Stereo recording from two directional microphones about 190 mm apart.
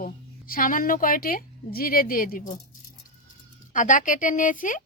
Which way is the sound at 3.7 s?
45° left (ahead or behind).